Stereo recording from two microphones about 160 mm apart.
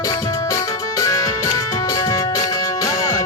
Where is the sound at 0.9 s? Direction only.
20° left (ahead or behind).